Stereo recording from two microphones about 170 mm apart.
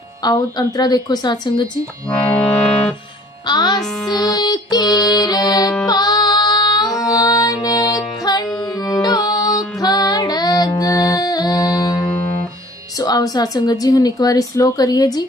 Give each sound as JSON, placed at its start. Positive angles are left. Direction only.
{"t": 0.2, "sound": "speech", "side_deg": 25}
{"t": 2.0, "sound": "music", "side_deg": 5}
{"t": 3.4, "sound": "music", "side_deg": 25}
{"t": 13.0, "sound": "speech", "side_deg": 20}